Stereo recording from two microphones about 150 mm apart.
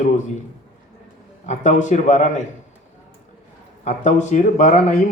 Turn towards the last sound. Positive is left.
turn(degrees=50)  # may be behind; listen again after turning